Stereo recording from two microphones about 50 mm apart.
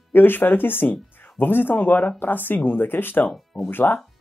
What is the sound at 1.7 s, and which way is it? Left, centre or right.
Speech, left.